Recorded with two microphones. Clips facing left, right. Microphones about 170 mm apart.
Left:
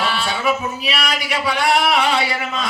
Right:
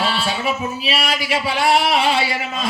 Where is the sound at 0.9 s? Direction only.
30° right (ahead or behind).